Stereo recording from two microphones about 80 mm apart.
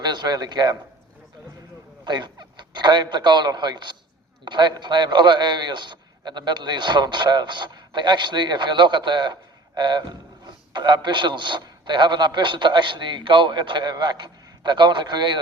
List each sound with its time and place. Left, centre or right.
0.0 s a man's voice: right
2.0 s a man's voice: right